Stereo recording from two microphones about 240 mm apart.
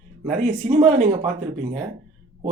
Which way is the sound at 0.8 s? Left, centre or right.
Right.